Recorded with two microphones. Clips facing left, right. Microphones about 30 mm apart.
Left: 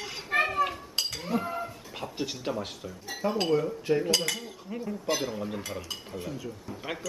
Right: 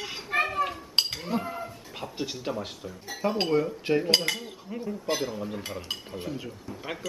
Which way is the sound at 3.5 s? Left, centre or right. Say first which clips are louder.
Right 1 dB; right.